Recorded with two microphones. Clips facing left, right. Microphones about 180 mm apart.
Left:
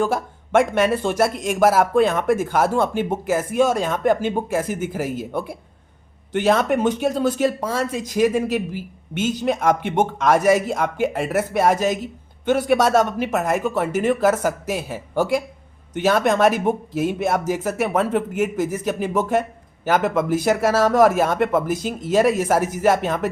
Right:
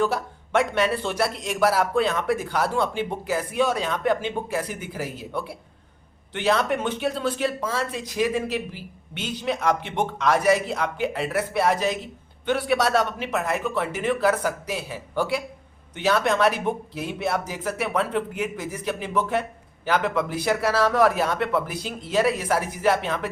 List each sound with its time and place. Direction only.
0.0 s speech: 50° left (ahead or behind)